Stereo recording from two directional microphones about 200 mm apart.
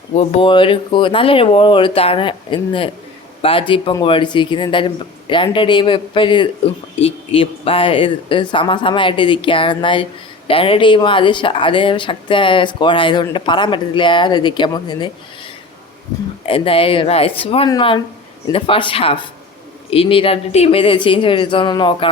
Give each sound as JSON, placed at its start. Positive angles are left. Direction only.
{"t": 0.2, "sound": "speech", "side_deg": 30}
{"t": 16.5, "sound": "speech", "side_deg": 25}